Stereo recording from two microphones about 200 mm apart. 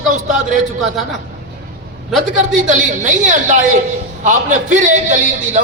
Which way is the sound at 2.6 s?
40° right (ahead or behind).